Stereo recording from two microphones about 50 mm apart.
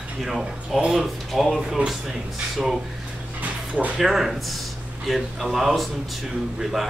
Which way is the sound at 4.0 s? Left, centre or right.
Centre.